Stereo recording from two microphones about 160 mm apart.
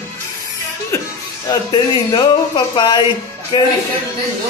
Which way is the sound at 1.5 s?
25° left (ahead or behind).